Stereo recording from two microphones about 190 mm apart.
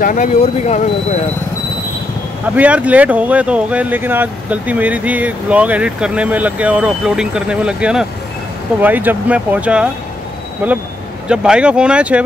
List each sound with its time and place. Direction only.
0.0 s speech: 40° left (ahead or behind)
2.4 s speech: 10° right (ahead or behind)